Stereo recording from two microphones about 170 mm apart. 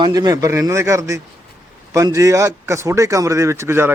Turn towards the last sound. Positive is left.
turn(degrees=-15)  # may be behind; listen again after turning